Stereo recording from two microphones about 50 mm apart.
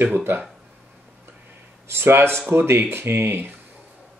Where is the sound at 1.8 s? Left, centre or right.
Right.